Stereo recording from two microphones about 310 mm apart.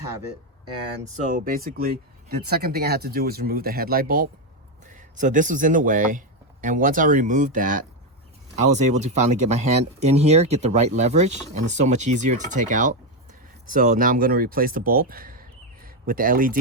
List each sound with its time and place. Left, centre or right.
1.2 s speech: right